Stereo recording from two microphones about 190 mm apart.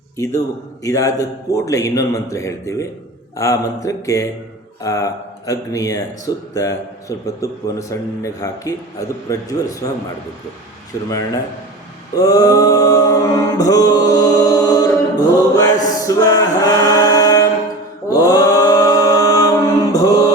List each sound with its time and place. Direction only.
0.2 s a man's voice: 15° left (ahead or behind)
12.1 s mantra: 20° left (ahead or behind)